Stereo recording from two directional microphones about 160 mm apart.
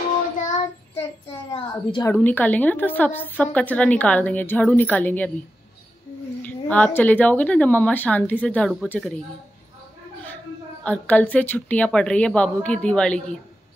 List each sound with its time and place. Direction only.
1.5 s a child's voice: 30° left (ahead or behind)
2.0 s a woman's voice: 10° left (ahead or behind)
6.4 s a woman's voice: 10° left (ahead or behind)
10.8 s a woman's voice: 10° left (ahead or behind)